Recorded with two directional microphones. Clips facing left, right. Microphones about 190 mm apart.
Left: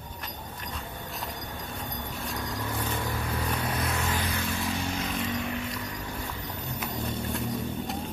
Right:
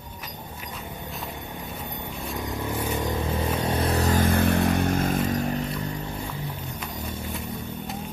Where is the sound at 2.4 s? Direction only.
20° right (ahead or behind).